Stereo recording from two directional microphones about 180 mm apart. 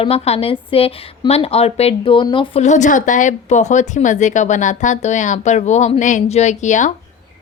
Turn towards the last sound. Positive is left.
turn(degrees=40)  # may be behind; listen again after turning